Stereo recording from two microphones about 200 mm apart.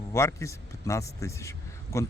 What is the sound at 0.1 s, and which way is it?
A man's voice, 15° left (ahead or behind).